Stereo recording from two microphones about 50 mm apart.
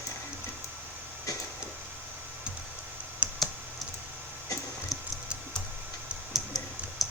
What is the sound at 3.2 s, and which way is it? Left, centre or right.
Computer keyboard, right.